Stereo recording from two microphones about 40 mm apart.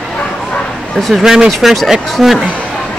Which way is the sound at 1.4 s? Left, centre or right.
Centre.